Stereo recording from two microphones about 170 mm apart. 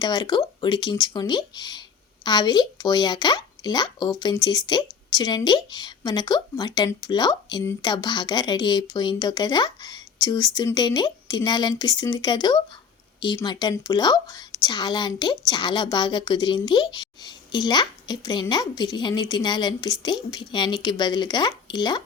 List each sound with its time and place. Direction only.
0.0 s speech: 25° left (ahead or behind)